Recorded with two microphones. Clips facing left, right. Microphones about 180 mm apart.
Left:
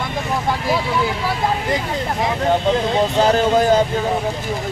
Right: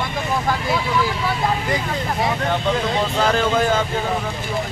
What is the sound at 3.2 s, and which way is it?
Speech, 40° left (ahead or behind).